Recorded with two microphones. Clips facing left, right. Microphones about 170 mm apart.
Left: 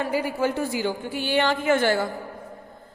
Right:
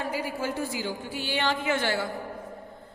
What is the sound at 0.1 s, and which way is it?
A woman's voice, 65° left (ahead or behind).